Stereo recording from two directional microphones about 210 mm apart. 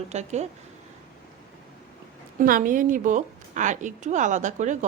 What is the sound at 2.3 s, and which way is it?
A woman's voice, 40° right (ahead or behind).